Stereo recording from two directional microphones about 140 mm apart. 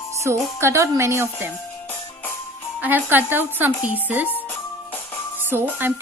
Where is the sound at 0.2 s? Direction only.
20° right (ahead or behind).